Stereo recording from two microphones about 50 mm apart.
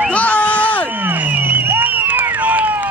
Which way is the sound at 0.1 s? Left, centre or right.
Left.